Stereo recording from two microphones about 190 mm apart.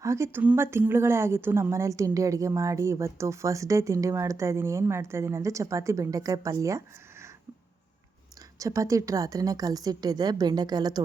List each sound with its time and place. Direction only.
0.0 s speech: 15° right (ahead or behind)
8.5 s a woman's voice: 15° right (ahead or behind)